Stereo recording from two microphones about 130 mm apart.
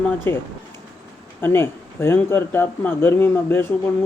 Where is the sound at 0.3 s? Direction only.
15° left (ahead or behind).